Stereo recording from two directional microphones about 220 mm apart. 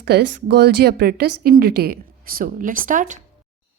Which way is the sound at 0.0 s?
50° right (ahead or behind).